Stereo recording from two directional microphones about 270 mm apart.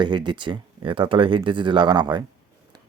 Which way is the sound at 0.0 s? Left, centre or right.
Centre.